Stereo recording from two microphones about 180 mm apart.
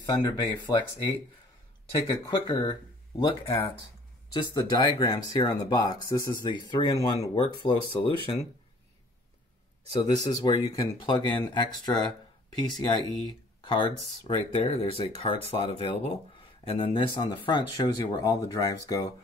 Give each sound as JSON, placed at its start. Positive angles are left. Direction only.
{"t": 0.0, "sound": "speech", "side_deg": 25}
{"t": 9.9, "sound": "speech", "side_deg": 20}
{"t": 13.6, "sound": "a sound", "side_deg": 25}
{"t": 14.2, "sound": "speech", "side_deg": 30}